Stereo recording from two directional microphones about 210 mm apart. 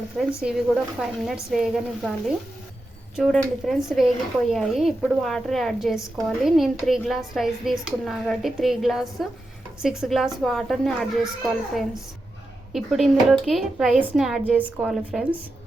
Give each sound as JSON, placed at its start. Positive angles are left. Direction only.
{"t": 0.4, "sound": "speech", "side_deg": 0}